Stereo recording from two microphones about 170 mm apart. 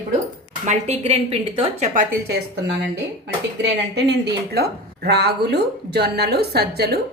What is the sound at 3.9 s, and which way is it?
A woman's voice, 80° right.